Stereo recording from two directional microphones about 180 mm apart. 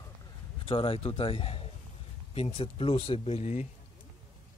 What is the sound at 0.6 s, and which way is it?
Speech, 30° left (ahead or behind).